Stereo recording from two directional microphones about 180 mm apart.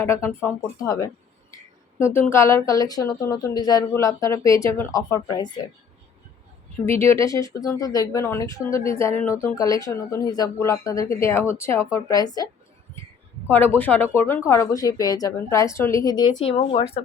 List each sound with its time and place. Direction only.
0.0 s speech: 15° left (ahead or behind)
7.0 s speech: 15° left (ahead or behind)
13.5 s speech: 10° left (ahead or behind)
16.4 s speech: 35° left (ahead or behind)